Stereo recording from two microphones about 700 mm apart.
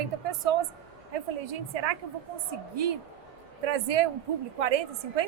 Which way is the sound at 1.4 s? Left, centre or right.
Right.